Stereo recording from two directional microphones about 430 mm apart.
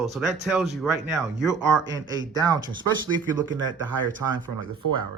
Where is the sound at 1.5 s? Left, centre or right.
Right.